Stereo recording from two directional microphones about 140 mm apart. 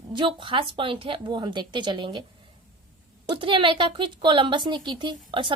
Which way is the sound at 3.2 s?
35° right (ahead or behind).